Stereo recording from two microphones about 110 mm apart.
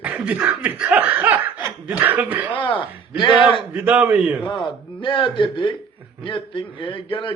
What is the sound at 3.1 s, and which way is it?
Speech, 45° left (ahead or behind).